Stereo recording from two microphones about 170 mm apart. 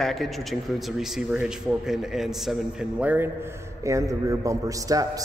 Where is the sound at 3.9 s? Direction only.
20° right (ahead or behind).